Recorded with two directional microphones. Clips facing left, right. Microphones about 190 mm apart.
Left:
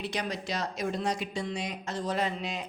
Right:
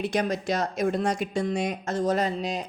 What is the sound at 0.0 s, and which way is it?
A woman's voice, 50° right (ahead or behind).